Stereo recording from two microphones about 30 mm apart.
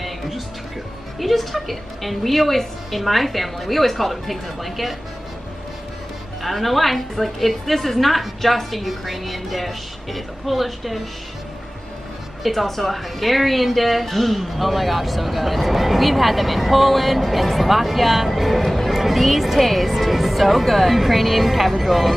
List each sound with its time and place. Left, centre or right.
1.2 s a woman's voice: centre
6.4 s a woman's voice: centre
12.4 s a woman's voice: centre